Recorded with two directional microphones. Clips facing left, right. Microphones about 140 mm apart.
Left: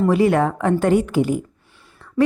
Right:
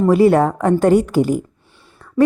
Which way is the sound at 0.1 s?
40° right (ahead or behind).